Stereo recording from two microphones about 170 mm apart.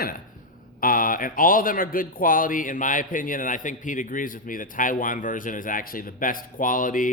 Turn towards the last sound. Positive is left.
turn(degrees=50)  # may be behind; listen again after turning